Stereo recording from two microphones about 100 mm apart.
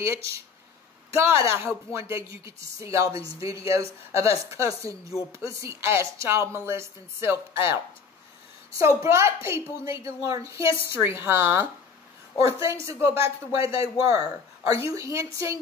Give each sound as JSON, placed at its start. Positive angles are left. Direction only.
{"t": 0.0, "sound": "a woman's voice", "side_deg": -30}